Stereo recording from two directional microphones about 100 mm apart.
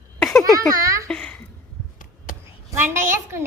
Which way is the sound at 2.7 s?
25° right (ahead or behind).